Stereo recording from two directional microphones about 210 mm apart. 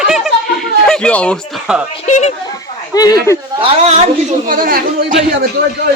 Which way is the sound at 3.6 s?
30° right (ahead or behind).